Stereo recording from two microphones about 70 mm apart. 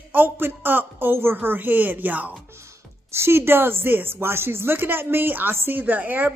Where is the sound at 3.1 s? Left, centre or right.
Right.